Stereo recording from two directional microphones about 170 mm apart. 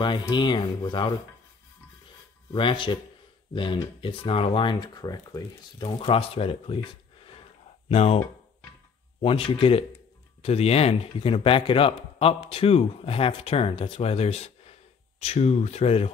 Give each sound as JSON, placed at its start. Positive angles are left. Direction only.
{"t": 0.3, "sound": "speech", "side_deg": 25}
{"t": 2.5, "sound": "a man's voice", "side_deg": 30}
{"t": 9.2, "sound": "a man's voice", "side_deg": 30}